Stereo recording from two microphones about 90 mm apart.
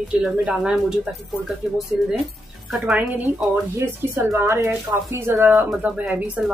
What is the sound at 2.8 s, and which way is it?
Speech, 15° right (ahead or behind).